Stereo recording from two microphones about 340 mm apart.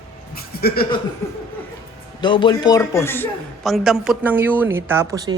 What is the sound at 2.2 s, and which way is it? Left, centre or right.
A man's voice, centre.